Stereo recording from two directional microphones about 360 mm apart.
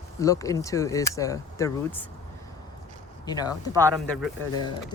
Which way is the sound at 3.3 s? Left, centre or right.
Centre.